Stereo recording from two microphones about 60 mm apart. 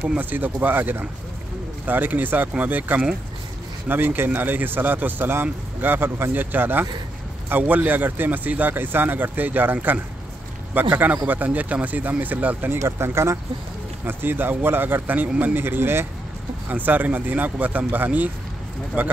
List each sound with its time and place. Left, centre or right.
0.2 s speech: right
12.8 s speech: right
14.0 s speech: right
15.6 s speech: right